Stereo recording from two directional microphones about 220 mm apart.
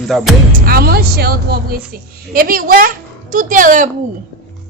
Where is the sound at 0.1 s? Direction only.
Centre (ahead or behind).